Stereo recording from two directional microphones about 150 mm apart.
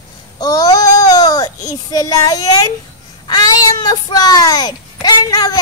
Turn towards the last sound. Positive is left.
turn(degrees=25)  # may be behind; listen again after turning